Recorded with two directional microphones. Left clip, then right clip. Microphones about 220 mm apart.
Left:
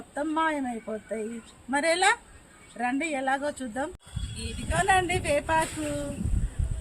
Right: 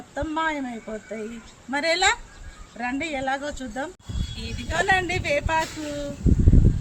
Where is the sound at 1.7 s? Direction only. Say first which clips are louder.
Right 2 dB; 5° right (ahead or behind).